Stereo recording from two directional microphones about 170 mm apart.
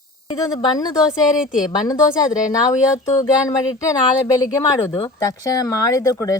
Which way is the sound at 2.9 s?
20° left (ahead or behind).